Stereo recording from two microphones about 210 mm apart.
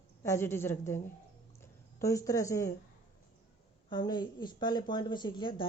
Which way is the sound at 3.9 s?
20° left (ahead or behind).